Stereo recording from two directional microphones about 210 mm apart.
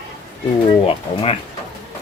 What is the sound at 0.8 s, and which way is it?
Speech, 30° left (ahead or behind).